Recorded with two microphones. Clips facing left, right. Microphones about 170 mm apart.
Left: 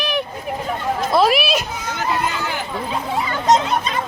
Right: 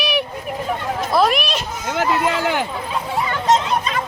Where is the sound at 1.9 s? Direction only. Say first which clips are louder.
Right 4 dB; 90° right.